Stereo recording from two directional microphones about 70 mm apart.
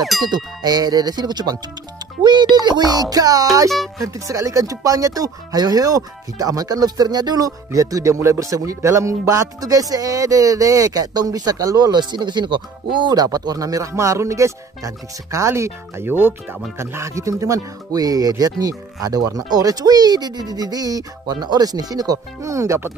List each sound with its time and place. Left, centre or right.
0.2 s speech: right
2.2 s speech: right
4.0 s speech: right
16.7 s speech: right
22.4 s speech: right